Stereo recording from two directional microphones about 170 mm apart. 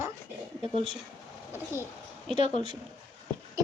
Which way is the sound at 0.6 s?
30° right (ahead or behind).